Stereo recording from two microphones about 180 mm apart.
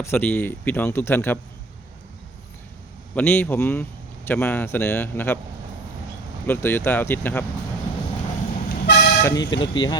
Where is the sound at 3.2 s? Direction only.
10° left (ahead or behind).